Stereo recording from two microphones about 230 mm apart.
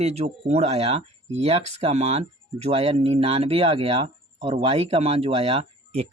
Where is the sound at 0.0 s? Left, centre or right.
Right.